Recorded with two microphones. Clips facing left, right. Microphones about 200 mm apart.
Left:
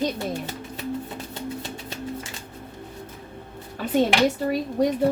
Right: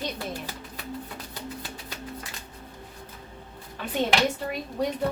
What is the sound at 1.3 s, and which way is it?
Music, 25° left (ahead or behind).